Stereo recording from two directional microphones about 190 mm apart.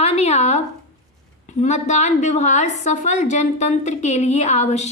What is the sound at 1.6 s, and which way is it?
A woman's voice, 35° left (ahead or behind).